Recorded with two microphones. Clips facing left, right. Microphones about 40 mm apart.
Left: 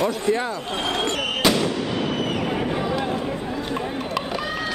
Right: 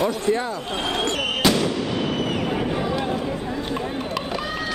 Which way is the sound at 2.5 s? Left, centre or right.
Centre.